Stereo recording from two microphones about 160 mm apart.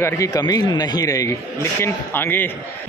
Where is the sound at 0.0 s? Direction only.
20° left (ahead or behind).